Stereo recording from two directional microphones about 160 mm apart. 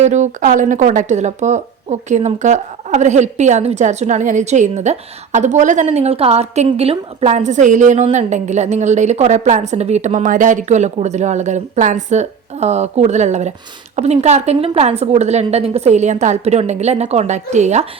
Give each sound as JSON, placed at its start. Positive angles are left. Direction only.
{"t": 0.0, "sound": "speech", "side_deg": -50}